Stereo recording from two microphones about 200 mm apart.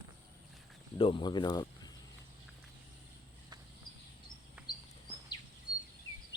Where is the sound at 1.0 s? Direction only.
25° left (ahead or behind).